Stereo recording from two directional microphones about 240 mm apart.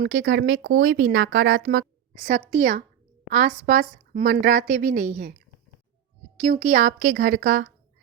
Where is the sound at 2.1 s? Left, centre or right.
Right.